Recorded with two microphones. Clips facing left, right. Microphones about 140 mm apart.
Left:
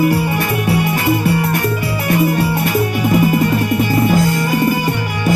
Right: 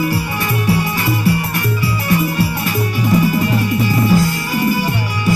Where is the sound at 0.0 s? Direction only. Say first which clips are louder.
Left 4 dB; 50° left (ahead or behind).